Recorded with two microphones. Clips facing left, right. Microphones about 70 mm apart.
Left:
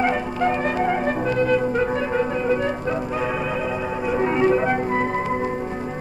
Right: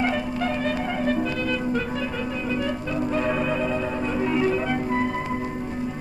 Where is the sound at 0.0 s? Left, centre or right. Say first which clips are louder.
Left 4 dB; left.